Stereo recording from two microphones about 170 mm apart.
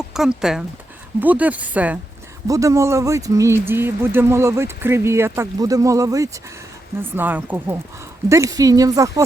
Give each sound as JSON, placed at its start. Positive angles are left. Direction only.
{"t": 0.1, "sound": "speech", "side_deg": -5}